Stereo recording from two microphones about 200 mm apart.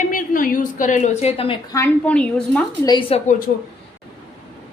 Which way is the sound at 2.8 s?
25° left (ahead or behind).